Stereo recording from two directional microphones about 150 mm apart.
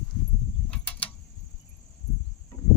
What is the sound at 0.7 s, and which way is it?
Mechanisms, 10° left (ahead or behind).